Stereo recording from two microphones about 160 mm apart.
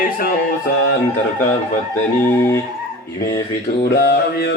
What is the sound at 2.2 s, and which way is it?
Music, 15° left (ahead or behind).